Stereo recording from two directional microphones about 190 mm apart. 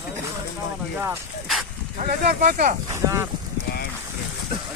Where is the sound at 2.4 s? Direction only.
40° right (ahead or behind).